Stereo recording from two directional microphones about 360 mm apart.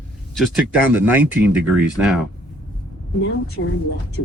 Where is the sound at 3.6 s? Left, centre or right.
Left.